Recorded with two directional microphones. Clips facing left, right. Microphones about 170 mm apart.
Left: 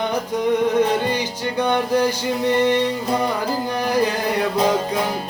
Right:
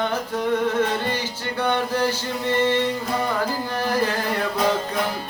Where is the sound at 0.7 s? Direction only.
15° left (ahead or behind).